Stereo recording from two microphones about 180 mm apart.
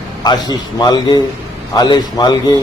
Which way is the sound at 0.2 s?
20° left (ahead or behind).